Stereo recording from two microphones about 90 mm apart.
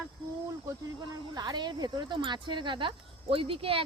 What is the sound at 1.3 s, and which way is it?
Speech, 45° right (ahead or behind).